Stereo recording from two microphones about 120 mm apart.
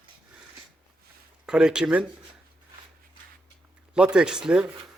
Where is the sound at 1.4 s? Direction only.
5° right (ahead or behind).